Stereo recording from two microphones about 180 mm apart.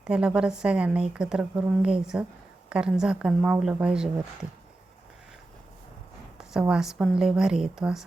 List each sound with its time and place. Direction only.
0.1 s a woman's voice: 5° right (ahead or behind)
6.5 s a woman's voice: 5° right (ahead or behind)